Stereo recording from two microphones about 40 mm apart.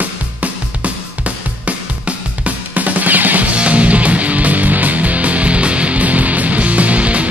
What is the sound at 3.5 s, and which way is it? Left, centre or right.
Music, right.